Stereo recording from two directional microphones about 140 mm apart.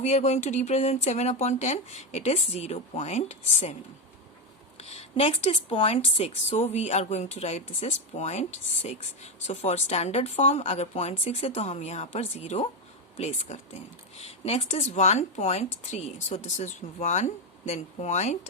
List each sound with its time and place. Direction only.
0.0 s a woman's voice: 55° left (ahead or behind)
4.8 s a woman's voice: 50° left (ahead or behind)